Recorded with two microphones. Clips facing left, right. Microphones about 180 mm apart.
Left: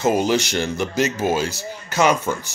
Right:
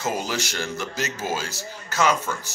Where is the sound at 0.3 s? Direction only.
20° left (ahead or behind).